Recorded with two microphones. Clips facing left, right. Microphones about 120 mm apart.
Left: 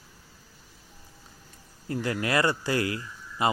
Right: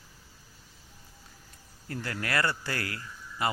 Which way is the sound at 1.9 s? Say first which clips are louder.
Left 5 dB; 20° left (ahead or behind).